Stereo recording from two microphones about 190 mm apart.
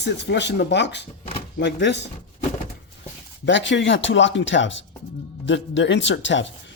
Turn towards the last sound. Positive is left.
turn(degrees=75)  # may be behind; listen again after turning